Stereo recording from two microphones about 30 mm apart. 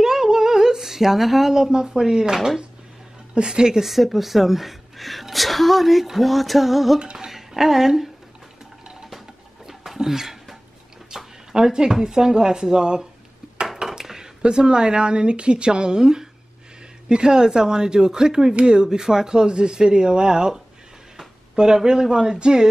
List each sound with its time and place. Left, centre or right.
0.0 s speech: centre
3.3 s speech: right
3.8 s speech: centre
7.0 s speech: right
7.2 s a sound: centre
9.9 s a sound: centre
11.1 s speech: centre
13.8 s a sound: centre
14.4 s speech: right